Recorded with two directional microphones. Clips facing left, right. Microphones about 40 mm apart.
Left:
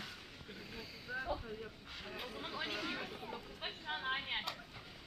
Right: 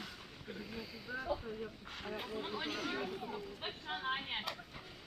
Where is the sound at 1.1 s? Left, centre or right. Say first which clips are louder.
Right 2 dB; centre.